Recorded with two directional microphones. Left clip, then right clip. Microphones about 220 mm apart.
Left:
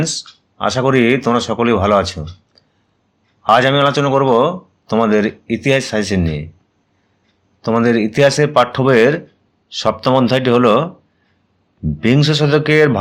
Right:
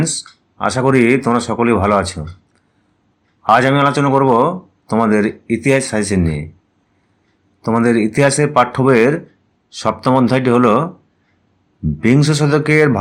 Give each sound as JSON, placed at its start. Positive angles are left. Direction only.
{"t": 0.0, "sound": "speech", "side_deg": -5}
{"t": 7.6, "sound": "speech", "side_deg": -5}
{"t": 11.9, "sound": "speech", "side_deg": 0}